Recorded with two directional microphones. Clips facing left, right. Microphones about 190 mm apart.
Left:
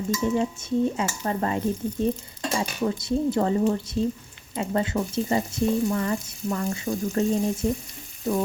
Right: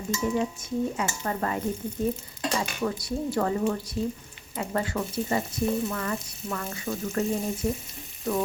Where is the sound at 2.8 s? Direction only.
20° left (ahead or behind).